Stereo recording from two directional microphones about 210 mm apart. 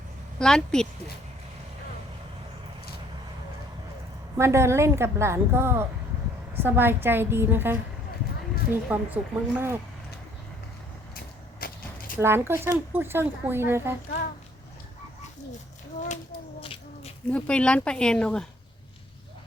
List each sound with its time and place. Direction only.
0.3 s speech: 5° left (ahead or behind)
4.4 s speech: 10° right (ahead or behind)
11.6 s a sound: 45° left (ahead or behind)
12.2 s speech: 10° right (ahead or behind)
16.6 s a sound: 25° left (ahead or behind)
17.3 s speech: 5° left (ahead or behind)